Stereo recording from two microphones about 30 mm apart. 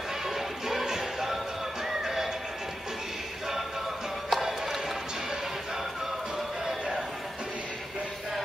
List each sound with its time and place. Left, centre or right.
0.3 s music: centre
4.4 s music: centre